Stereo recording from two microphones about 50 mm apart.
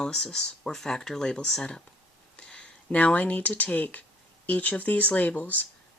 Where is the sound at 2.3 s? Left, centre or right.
Centre.